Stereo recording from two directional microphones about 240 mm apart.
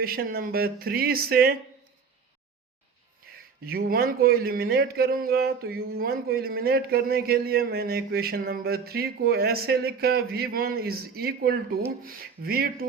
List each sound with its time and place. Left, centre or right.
0.0 s speech: right
3.3 s a sound: right
3.6 s speech: right